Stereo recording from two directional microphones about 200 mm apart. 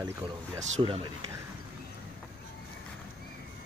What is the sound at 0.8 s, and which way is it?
Speech, 25° right (ahead or behind).